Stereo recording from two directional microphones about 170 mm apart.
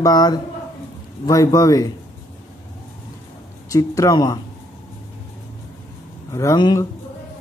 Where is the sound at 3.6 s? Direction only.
20° left (ahead or behind).